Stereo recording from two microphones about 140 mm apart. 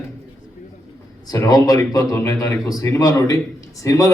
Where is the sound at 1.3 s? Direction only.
25° left (ahead or behind).